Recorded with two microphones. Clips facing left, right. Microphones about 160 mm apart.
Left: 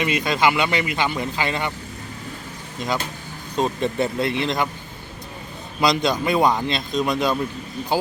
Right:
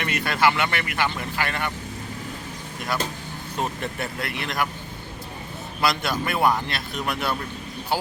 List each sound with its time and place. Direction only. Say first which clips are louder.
0.0 s speech: left 2 dB; 15° left (ahead or behind)
3.6 s speech: left 7 dB; 20° left (ahead or behind)
5.8 s speech: left 5 dB; 20° left (ahead or behind)